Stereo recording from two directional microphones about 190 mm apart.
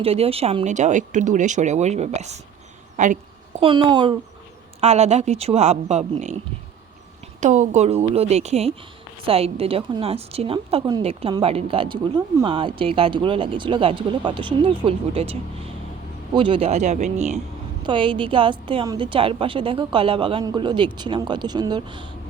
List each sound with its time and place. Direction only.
0.0 s a woman's voice: 30° right (ahead or behind)
2.9 s a sound: 40° right (ahead or behind)
3.6 s a woman's voice: 25° right (ahead or behind)
4.8 s a woman's voice: 35° right (ahead or behind)
7.4 s a woman's voice: 40° right (ahead or behind); by 22.1 s 25° right (ahead or behind)